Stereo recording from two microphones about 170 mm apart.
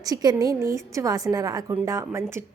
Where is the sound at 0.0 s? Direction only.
20° right (ahead or behind).